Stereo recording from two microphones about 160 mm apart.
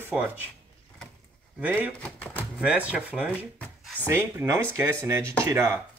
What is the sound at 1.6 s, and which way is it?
Speech, 10° right (ahead or behind).